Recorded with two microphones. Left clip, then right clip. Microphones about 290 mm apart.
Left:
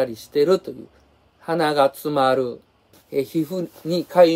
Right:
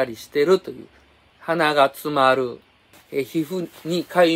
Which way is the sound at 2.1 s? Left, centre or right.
Centre.